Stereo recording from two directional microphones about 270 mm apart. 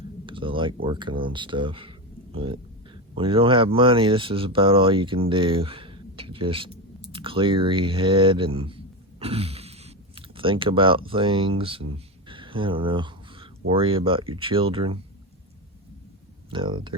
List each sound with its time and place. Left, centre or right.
0.3 s speech: centre
16.5 s speech: centre